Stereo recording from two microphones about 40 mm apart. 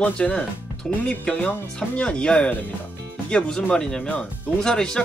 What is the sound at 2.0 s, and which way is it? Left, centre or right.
Speech, left.